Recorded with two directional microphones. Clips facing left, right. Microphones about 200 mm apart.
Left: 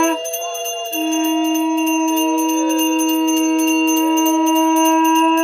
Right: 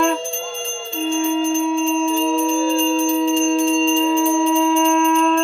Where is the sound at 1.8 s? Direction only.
Centre (ahead or behind).